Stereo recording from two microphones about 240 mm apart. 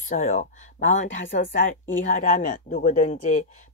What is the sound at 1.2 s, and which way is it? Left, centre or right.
Speech, left.